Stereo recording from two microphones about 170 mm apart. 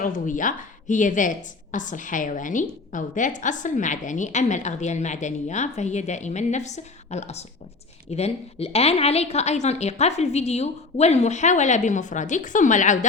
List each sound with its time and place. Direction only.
0.0 s a woman's voice: 50° left (ahead or behind)